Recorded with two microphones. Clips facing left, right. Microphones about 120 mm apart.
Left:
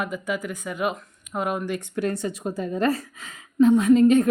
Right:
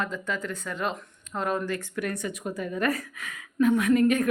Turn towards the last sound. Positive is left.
turn(degrees=25)  # may be behind; listen again after turning